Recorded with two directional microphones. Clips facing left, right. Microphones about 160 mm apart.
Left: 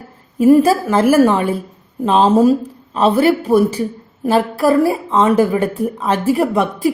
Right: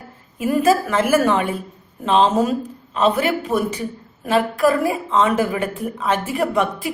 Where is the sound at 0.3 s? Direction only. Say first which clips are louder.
Left 7 dB; 35° left (ahead or behind).